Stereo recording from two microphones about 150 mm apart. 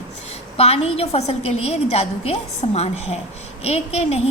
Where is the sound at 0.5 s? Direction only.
45° left (ahead or behind).